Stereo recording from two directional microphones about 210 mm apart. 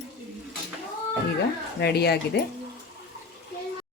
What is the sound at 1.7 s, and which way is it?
Speech, 50° left (ahead or behind).